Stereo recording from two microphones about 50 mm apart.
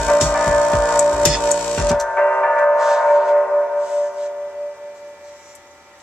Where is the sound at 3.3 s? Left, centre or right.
Centre.